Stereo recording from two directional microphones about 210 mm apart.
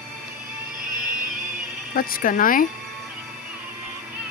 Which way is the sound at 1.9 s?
45° left (ahead or behind).